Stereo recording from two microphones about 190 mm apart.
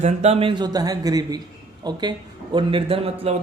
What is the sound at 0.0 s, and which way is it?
A man's voice, 35° right (ahead or behind).